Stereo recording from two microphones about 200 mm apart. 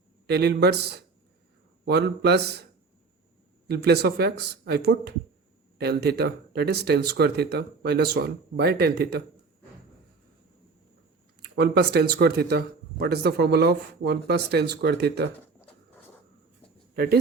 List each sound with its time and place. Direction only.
0.3 s speech: 55° right (ahead or behind)
3.7 s speech: 55° right (ahead or behind)
11.4 s speech: 50° right (ahead or behind)
16.9 s speech: 50° right (ahead or behind)